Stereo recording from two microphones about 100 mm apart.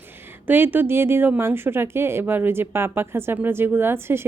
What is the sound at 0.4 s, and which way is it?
Speech, 20° right (ahead or behind).